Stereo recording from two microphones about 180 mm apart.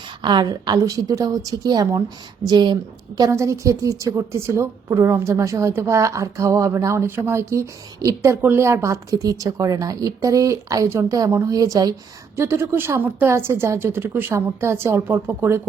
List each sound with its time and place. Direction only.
0.2 s a woman's voice: 25° right (ahead or behind)